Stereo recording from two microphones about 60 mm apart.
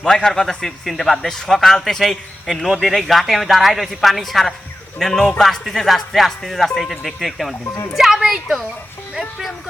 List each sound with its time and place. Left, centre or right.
0.0 s a man's voice: centre
7.6 s speech: left
7.9 s speech: centre